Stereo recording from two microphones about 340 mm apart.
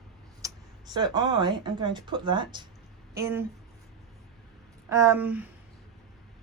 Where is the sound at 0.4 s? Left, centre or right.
Centre.